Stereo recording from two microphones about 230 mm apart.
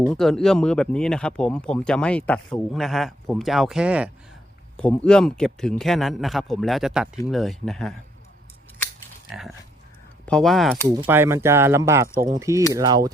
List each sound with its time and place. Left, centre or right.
0.1 s speech: centre
10.2 s speech: centre
10.8 s speech: centre